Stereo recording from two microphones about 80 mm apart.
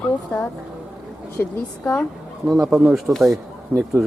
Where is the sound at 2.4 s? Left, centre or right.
Centre.